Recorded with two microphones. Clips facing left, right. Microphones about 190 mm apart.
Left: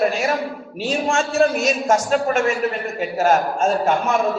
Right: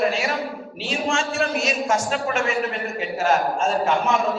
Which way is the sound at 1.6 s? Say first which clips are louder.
Left 4 dB; 45° left (ahead or behind).